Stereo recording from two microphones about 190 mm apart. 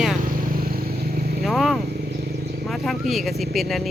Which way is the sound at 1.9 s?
55° right (ahead or behind).